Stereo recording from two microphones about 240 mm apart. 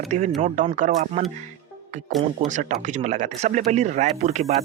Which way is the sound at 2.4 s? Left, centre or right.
Right.